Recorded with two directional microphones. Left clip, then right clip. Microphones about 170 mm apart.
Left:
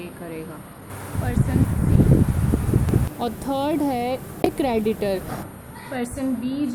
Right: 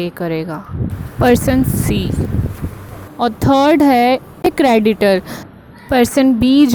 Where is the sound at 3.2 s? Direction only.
45° right (ahead or behind).